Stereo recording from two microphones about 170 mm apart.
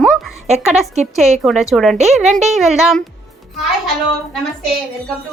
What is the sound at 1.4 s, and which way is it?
Speech, centre (ahead or behind).